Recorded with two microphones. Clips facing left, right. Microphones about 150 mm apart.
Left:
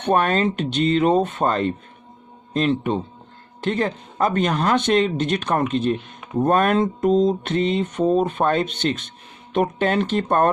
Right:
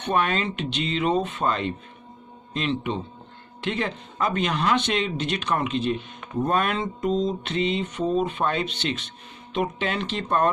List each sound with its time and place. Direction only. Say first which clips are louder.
0.0 s mantra: left 5 dB; 45° left (ahead or behind)